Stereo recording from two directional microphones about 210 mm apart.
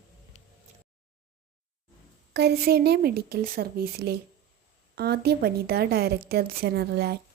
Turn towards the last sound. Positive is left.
turn(degrees=-50)  # may be behind; listen again after turning